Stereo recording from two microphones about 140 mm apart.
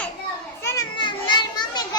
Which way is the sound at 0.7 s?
35° left (ahead or behind).